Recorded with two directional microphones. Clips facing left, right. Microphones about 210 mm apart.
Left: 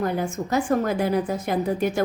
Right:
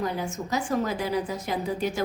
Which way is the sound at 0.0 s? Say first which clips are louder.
Left 4 dB; 55° left (ahead or behind).